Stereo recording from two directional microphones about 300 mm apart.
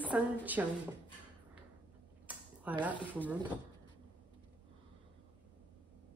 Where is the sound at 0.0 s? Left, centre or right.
Centre.